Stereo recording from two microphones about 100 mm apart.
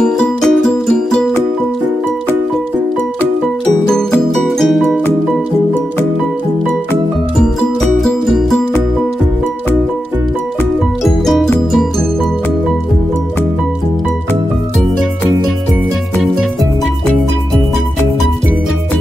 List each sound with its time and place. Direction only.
0.0 s music: 5° left (ahead or behind)
4.6 s music: centre (ahead or behind)
8.0 s music: centre (ahead or behind)